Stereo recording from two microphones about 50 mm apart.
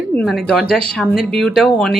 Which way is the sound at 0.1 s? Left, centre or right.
Left.